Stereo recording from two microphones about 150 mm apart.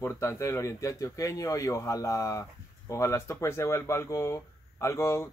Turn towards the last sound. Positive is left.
turn(degrees=20)  # may be behind; listen again after turning